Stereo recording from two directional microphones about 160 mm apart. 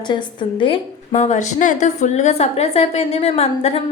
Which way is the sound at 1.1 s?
45° left (ahead or behind).